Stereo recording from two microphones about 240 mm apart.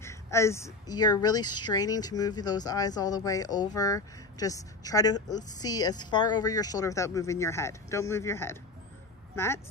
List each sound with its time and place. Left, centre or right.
0.0 s speech: centre